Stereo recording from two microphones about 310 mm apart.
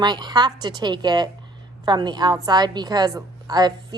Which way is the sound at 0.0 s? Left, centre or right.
Centre.